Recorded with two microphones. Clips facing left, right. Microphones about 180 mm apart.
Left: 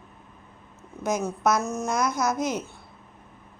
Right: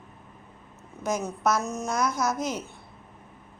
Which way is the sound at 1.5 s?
15° right (ahead or behind).